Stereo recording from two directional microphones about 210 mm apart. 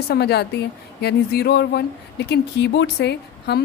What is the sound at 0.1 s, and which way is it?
Speech, 50° left (ahead or behind).